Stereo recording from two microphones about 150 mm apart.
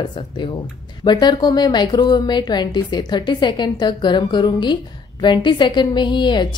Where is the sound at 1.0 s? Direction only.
25° left (ahead or behind).